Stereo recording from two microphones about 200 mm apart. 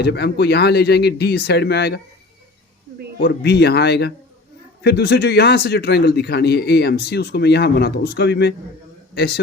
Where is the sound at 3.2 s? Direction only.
55° left (ahead or behind).